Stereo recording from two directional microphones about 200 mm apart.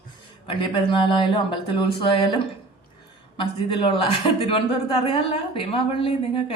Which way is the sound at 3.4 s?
25° left (ahead or behind).